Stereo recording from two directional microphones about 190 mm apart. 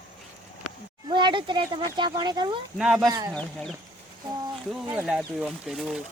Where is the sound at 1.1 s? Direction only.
25° right (ahead or behind).